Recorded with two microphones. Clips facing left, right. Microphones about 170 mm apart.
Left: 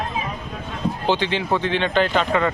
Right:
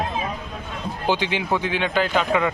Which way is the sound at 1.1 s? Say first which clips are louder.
Left 1 dB; 10° right (ahead or behind).